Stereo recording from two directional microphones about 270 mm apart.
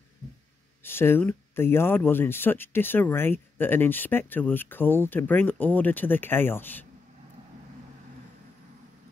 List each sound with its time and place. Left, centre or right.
0.8 s speech: centre